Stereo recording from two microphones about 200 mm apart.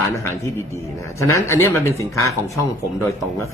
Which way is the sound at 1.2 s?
15° left (ahead or behind).